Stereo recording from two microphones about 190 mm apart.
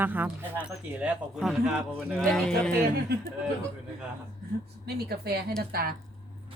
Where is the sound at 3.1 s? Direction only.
55° right (ahead or behind).